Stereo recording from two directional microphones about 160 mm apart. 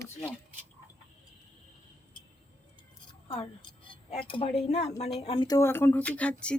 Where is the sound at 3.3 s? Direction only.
35° left (ahead or behind).